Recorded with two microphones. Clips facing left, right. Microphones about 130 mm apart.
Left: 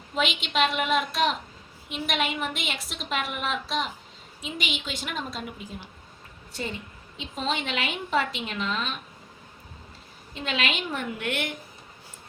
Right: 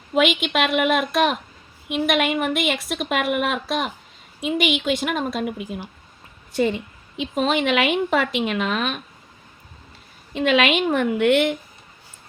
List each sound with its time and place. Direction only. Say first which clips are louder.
0.1 s a woman's voice: right 8 dB; 60° right (ahead or behind)
10.3 s a woman's voice: right 11 dB; 70° right (ahead or behind); by 11.4 s 90° right